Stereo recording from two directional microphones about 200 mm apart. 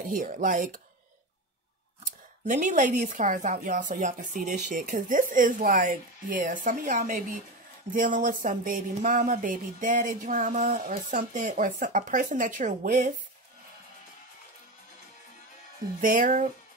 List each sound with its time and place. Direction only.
0.1 s speech: 40° right (ahead or behind)
2.4 s speech: 40° right (ahead or behind)
16.0 s speech: 40° right (ahead or behind)